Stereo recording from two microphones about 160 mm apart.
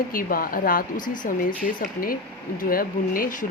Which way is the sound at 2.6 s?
65° left (ahead or behind).